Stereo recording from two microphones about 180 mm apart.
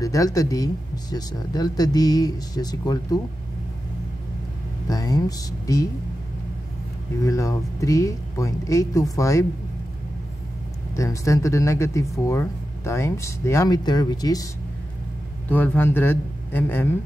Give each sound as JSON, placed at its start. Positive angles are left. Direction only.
{"t": 0.0, "sound": "speech", "side_deg": 20}
{"t": 4.8, "sound": "speech", "side_deg": 20}
{"t": 7.2, "sound": "speech", "side_deg": 15}
{"t": 11.0, "sound": "a man's voice", "side_deg": 15}